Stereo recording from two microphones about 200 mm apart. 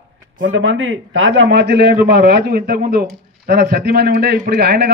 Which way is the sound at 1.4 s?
55° right (ahead or behind).